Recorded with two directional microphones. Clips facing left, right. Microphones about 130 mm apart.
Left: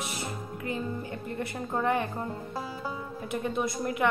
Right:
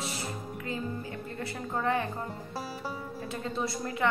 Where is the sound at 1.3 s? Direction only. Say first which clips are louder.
Left 3 dB; 20° left (ahead or behind).